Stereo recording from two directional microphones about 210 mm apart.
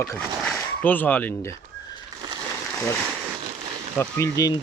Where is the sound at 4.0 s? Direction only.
15° left (ahead or behind).